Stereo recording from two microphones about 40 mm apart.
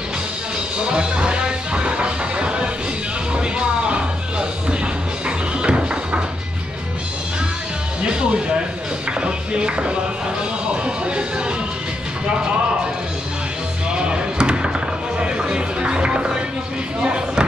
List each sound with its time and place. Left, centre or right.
0.7 s music: right
8.0 s music: right
13.9 s a sound: right
15.1 s music: right